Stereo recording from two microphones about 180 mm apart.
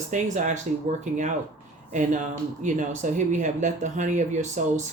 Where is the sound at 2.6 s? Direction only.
45° right (ahead or behind).